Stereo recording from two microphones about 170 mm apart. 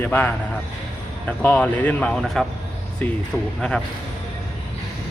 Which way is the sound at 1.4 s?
10° left (ahead or behind).